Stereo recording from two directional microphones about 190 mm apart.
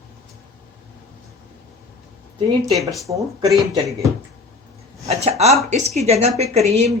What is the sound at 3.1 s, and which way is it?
Speech, 20° right (ahead or behind).